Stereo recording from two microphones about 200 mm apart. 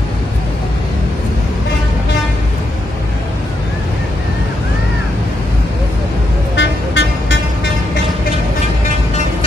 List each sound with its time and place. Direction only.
6.5 s vehicle: 60° left (ahead or behind)